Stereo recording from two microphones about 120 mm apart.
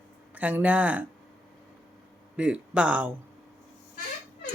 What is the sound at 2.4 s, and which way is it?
Speech, 10° right (ahead or behind).